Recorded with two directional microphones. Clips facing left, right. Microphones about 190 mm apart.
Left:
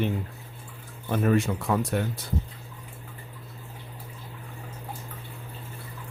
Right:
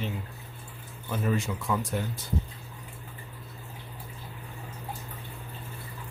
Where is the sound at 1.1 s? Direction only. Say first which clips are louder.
Left 6 dB; 60° left (ahead or behind).